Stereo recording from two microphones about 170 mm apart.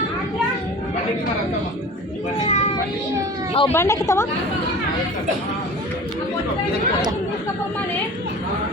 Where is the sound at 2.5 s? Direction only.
40° left (ahead or behind).